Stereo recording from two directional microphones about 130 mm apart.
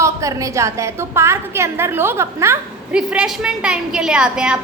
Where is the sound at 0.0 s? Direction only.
25° right (ahead or behind).